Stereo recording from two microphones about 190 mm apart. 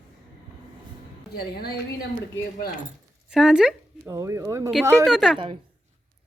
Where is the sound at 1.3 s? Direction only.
55° left (ahead or behind).